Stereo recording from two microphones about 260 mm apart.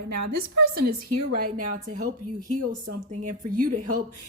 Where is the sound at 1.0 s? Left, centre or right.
Right.